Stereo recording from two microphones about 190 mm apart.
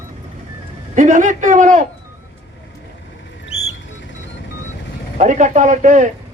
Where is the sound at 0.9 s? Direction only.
40° right (ahead or behind).